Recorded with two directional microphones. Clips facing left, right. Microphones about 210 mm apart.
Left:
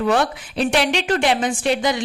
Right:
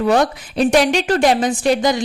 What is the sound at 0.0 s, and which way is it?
A woman's voice, 40° right (ahead or behind).